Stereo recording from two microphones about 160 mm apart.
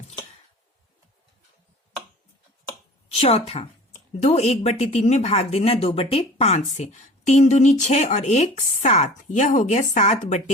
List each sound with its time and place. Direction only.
3.1 s speech: 40° left (ahead or behind)